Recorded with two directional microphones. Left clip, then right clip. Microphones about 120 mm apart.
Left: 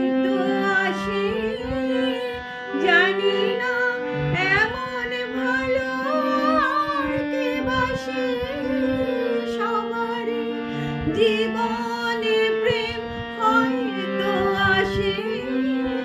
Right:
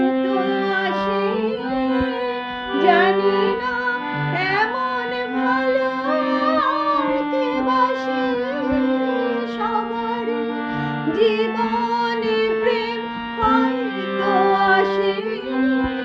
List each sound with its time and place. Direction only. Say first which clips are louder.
0.0 s music: right 2 dB; 35° right (ahead or behind)
2.8 s music: right 2 dB; 10° left (ahead or behind)
3.2 s music: right 3 dB; 35° right (ahead or behind)
5.5 s music: right 4 dB; 15° left (ahead or behind)
11.2 s music: right 2 dB; 15° left (ahead or behind)
14.3 s music: right 6 dB; 35° right (ahead or behind)
14.5 s music: right 2 dB; 15° left (ahead or behind)
15.5 s music: right 7 dB; 30° right (ahead or behind)